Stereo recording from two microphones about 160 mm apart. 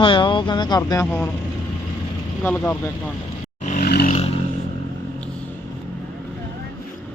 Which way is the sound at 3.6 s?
55° left (ahead or behind).